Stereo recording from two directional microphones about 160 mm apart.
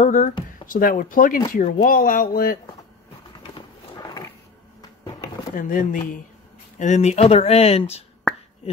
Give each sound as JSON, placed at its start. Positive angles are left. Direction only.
{"t": 0.0, "sound": "speech", "side_deg": 50}
{"t": 3.9, "sound": "roaring cats", "side_deg": 20}
{"t": 5.6, "sound": "speech", "side_deg": 55}
{"t": 6.8, "sound": "speech", "side_deg": 45}